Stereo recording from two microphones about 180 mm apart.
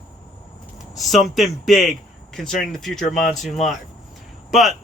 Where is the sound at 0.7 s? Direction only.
Centre (ahead or behind).